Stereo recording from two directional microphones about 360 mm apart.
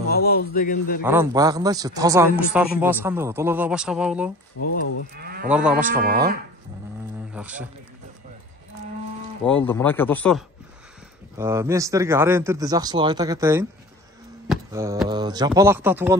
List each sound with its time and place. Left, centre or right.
0.1 s a man's voice: left
1.0 s speech: centre
5.1 s cattle: right
5.5 s speech: centre
5.9 s speech: right
7.3 s a man's voice: centre
9.4 s speech: centre
11.3 s speech: centre